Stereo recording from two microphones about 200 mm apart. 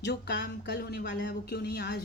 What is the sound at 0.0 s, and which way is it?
A woman's voice, 55° left (ahead or behind).